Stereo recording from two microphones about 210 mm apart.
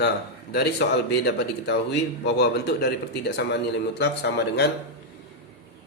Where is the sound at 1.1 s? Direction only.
55° left (ahead or behind).